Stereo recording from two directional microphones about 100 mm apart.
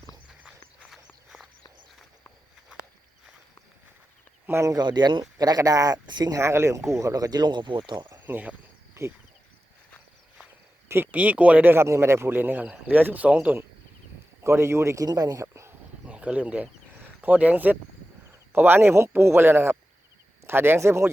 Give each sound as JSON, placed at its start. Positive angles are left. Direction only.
{"t": 0.9, "sound": "walk", "side_deg": -5}
{"t": 4.4, "sound": "speech", "side_deg": -25}
{"t": 4.7, "sound": "speech", "side_deg": -45}
{"t": 6.3, "sound": "speech", "side_deg": -30}
{"t": 8.3, "sound": "speech", "side_deg": -15}
{"t": 9.0, "sound": "speech", "side_deg": -30}
{"t": 10.8, "sound": "a man's voice", "side_deg": -20}
{"t": 16.0, "sound": "a sound", "side_deg": -10}
{"t": 18.3, "sound": "speech", "side_deg": -20}